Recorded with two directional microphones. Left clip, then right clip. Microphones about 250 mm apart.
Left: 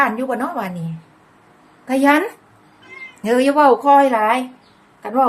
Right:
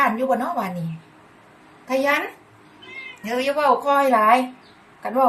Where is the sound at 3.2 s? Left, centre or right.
Left.